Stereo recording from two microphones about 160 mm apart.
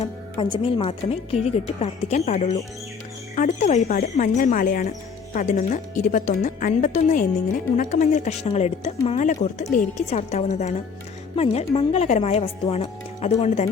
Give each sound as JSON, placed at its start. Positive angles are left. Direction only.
{"t": 0.0, "sound": "speech", "side_deg": 30}